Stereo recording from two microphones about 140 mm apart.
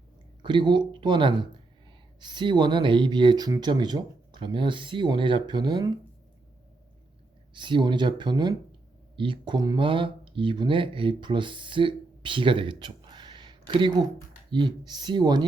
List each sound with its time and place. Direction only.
0.4 s speech: 35° right (ahead or behind)
7.5 s speech: 35° right (ahead or behind)